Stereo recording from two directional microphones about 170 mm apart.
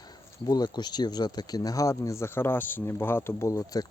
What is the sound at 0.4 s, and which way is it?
Speech, 25° left (ahead or behind).